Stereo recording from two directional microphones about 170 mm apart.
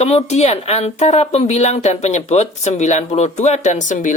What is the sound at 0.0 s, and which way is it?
Speech, 40° left (ahead or behind).